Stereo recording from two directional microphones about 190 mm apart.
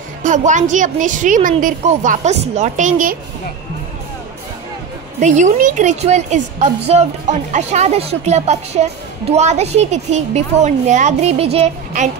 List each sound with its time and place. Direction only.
0.2 s a woman's voice: 40° right (ahead or behind)
5.2 s a woman's voice: 40° right (ahead or behind)